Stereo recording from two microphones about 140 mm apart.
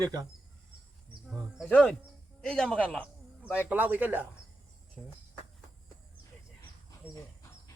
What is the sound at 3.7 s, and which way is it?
Speech, 10° right (ahead or behind).